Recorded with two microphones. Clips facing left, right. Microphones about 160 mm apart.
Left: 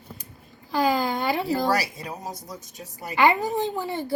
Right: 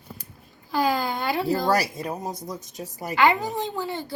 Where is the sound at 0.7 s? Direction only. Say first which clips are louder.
Left 1 dB; centre (ahead or behind).